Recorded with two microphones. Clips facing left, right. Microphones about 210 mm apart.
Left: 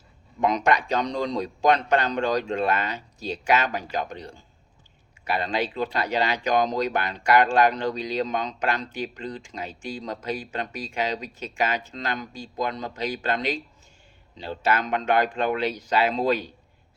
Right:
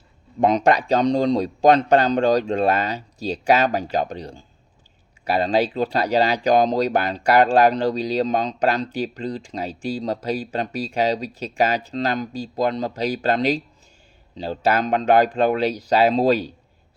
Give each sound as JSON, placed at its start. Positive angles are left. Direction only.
{"t": 0.3, "sound": "speech", "side_deg": -35}